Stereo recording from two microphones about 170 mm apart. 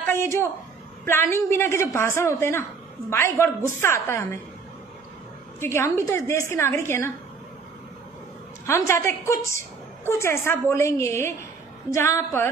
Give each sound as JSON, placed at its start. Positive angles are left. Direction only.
{"t": 0.0, "sound": "a woman's voice", "side_deg": 15}
{"t": 5.6, "sound": "a woman's voice", "side_deg": 15}
{"t": 8.6, "sound": "a woman's voice", "side_deg": 15}